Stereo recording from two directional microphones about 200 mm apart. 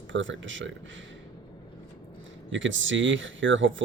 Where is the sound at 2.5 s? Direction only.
70° right (ahead or behind).